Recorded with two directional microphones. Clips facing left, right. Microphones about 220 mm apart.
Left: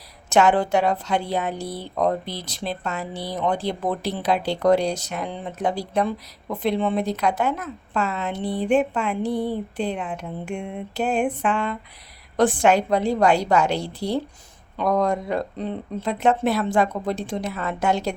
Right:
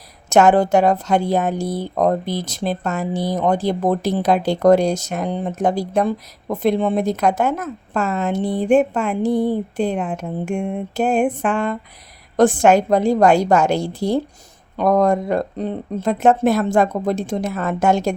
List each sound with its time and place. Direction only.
0.3 s speech: 45° right (ahead or behind)